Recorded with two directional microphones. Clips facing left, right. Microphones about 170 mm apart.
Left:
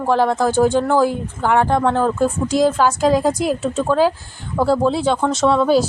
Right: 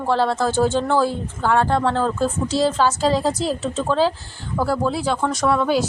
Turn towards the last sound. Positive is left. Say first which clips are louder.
# left 4 dB
turn(degrees=25)  # may be behind; listen again after turning